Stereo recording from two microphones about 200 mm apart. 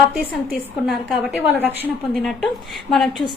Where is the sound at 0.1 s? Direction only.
Centre (ahead or behind).